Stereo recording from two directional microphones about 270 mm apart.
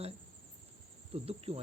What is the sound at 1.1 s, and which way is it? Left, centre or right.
Speech, right.